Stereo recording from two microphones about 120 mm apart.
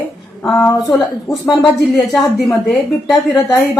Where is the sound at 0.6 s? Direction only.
25° left (ahead or behind).